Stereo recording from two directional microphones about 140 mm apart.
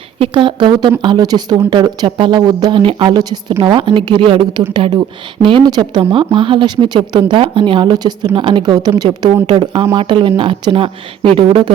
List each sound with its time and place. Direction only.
0.2 s a woman's voice: 35° right (ahead or behind)